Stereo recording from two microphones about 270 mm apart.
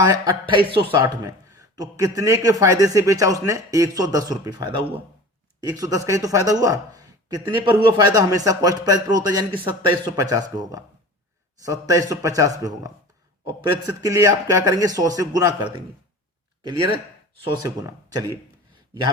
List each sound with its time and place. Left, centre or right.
0.0 s a man's voice: centre
14.0 s a man's voice: centre
17.4 s a man's voice: centre